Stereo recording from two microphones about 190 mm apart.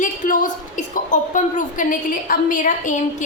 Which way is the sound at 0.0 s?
45° left (ahead or behind).